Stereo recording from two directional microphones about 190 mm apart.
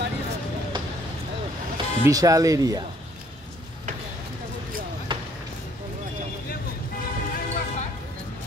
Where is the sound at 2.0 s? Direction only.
15° right (ahead or behind).